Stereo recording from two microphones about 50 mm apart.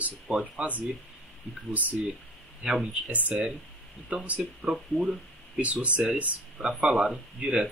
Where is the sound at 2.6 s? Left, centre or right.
Centre.